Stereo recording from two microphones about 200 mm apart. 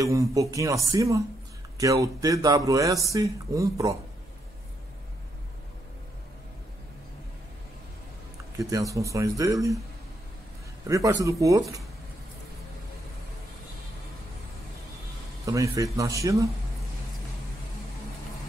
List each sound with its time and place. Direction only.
0.0 s speech: 15° right (ahead or behind)
8.5 s speech: 15° right (ahead or behind)
10.9 s speech: 15° right (ahead or behind)
15.4 s speech: 15° right (ahead or behind)